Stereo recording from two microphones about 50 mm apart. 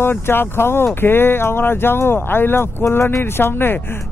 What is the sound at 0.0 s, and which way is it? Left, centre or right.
Speech, left.